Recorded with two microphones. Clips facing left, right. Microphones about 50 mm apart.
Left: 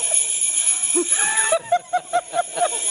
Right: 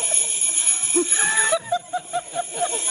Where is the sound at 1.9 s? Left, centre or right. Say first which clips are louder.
Left 5 dB; left.